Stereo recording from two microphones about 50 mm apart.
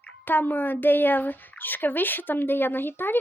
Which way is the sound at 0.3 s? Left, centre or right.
Left.